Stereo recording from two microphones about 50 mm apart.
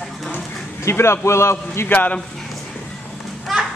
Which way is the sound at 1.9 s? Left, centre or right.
Left.